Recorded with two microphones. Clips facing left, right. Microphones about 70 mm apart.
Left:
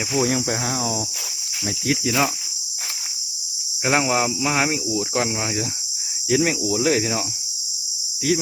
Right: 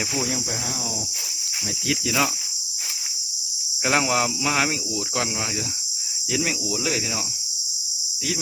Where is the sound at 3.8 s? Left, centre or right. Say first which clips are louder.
Left 2 dB; centre.